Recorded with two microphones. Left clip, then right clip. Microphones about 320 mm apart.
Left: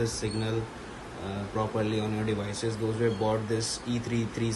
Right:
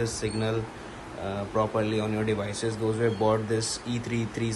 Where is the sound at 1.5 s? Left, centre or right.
Centre.